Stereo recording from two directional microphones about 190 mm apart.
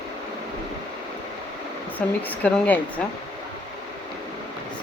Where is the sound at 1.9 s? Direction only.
10° left (ahead or behind).